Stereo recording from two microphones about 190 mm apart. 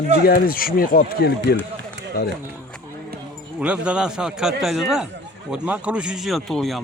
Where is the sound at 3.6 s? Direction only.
5° right (ahead or behind).